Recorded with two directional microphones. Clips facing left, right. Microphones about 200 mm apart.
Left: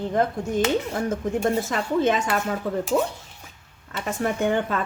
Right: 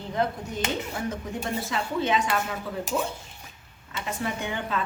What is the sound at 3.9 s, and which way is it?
Speech, 50° left (ahead or behind).